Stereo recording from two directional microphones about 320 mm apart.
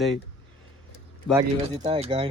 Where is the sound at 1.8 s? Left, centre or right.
Centre.